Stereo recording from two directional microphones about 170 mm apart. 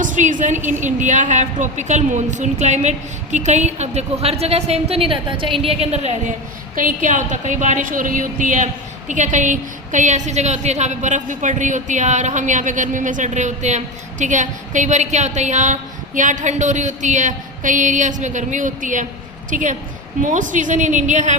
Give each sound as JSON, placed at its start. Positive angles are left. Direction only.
{"t": 0.0, "sound": "a woman's voice", "side_deg": -50}
{"t": 6.7, "sound": "a woman's voice", "side_deg": -50}